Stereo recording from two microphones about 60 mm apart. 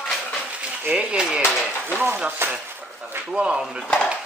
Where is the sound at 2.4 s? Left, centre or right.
Right.